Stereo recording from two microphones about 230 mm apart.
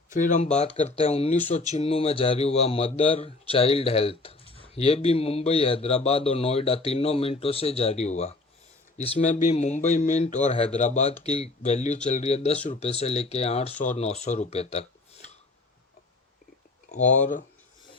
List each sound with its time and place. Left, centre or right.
0.1 s a man's voice: left
16.9 s speech: left